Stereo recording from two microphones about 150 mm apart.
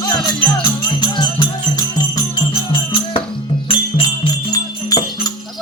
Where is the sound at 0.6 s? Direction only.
30° left (ahead or behind).